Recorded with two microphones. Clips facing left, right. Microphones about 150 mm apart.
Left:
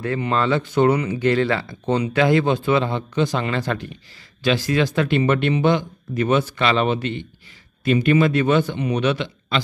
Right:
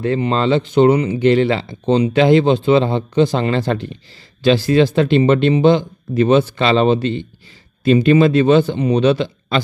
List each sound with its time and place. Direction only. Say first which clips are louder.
0.0 s speech: right 5 dB; 25° right (ahead or behind)